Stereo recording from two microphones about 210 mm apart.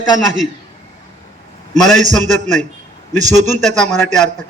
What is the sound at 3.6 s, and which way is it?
Speech, 5° left (ahead or behind).